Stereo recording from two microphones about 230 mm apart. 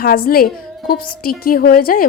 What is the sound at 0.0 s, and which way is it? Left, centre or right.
A woman's voice, left.